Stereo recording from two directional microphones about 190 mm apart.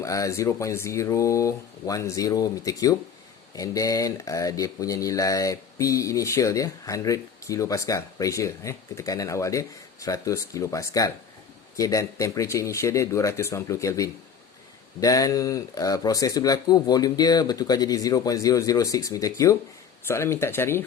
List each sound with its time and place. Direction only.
0.0 s speech: 15° left (ahead or behind)